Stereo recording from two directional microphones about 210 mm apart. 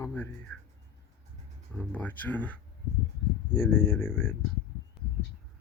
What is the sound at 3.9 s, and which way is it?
Speech, 5° left (ahead or behind).